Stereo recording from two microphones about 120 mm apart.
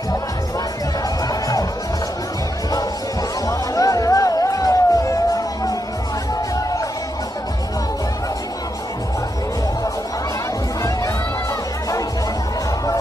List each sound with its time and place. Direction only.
1.3 s music: 30° left (ahead or behind)
3.4 s music: 30° left (ahead or behind)